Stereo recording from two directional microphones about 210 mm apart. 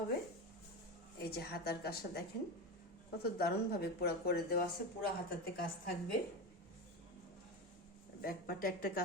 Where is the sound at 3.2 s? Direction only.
50° left (ahead or behind).